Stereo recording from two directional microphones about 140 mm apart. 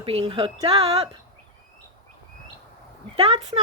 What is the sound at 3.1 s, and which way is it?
Speech, 45° right (ahead or behind).